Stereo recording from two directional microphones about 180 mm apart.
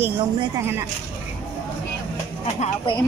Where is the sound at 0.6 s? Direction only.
15° right (ahead or behind).